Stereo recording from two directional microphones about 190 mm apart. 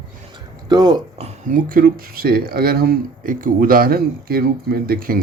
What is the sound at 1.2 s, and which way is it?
Speech, 35° right (ahead or behind).